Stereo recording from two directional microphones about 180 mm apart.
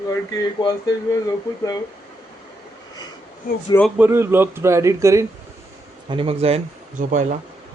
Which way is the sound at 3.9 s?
10° right (ahead or behind).